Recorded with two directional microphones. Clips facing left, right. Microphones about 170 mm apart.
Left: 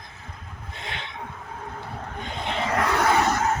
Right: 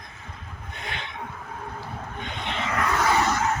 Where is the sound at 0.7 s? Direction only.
25° left (ahead or behind).